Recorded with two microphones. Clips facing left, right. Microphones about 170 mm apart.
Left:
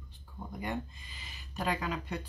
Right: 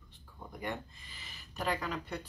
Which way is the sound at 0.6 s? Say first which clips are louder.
Left 2 dB; 15° left (ahead or behind).